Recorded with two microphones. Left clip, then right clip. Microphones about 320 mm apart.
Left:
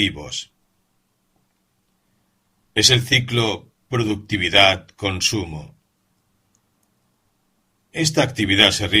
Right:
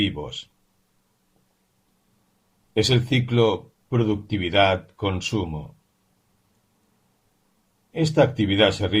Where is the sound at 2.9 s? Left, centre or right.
Left.